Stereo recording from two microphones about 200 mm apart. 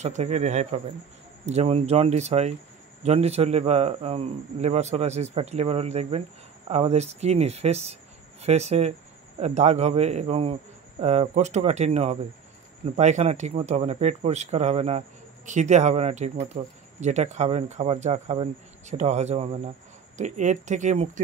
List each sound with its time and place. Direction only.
0.0 s speech: 35° right (ahead or behind)